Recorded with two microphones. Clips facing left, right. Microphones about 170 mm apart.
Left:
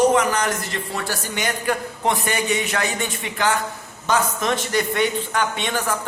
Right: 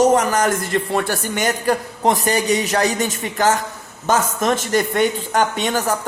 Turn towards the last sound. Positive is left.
turn(degrees=-40)  # may be behind; listen again after turning